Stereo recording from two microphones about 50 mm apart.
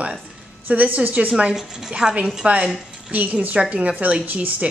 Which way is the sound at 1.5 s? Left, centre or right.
Centre.